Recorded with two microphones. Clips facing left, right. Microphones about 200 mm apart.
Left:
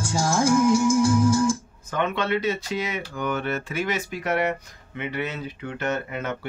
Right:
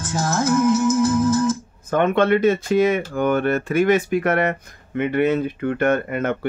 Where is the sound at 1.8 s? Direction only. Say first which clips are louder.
Right 8 dB; 50° right (ahead or behind).